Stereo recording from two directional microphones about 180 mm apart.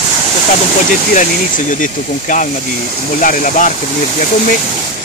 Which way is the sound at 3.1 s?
45° left (ahead or behind).